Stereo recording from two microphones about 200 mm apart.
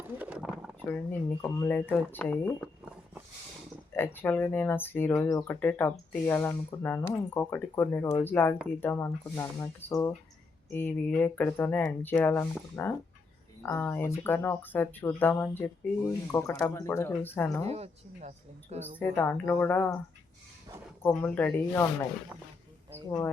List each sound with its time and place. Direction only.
0.2 s a sound: 5° right (ahead or behind)
0.9 s speech: 10° left (ahead or behind)
3.9 s speech: 10° left (ahead or behind)
17.7 s speech: 30° right (ahead or behind)
18.9 s speech: 10° left (ahead or behind)
21.0 s speech: 5° left (ahead or behind)
23.0 s speech: 15° left (ahead or behind)